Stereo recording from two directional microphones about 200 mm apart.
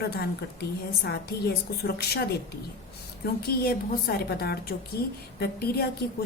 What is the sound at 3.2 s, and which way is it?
A woman's voice, 50° left (ahead or behind).